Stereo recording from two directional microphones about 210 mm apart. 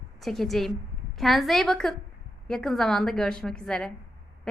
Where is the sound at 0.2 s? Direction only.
Centre (ahead or behind).